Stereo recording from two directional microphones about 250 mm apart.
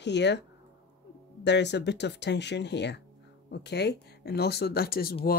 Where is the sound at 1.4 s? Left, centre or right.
Left.